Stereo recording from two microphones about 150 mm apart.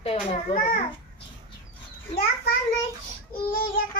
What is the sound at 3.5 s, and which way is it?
Child singing, 70° left (ahead or behind).